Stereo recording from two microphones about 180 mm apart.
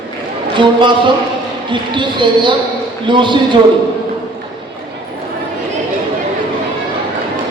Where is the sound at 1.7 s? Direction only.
25° right (ahead or behind).